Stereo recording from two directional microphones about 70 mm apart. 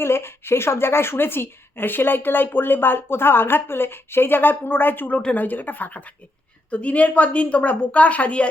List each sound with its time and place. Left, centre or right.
0.0 s a woman's voice: left; by 8.4 s centre